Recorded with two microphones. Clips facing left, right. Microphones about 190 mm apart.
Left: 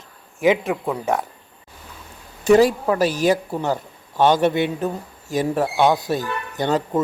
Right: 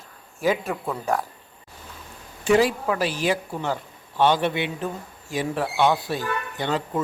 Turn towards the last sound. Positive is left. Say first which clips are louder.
# left 5 dB
turn(degrees=40)  # may be behind; listen again after turning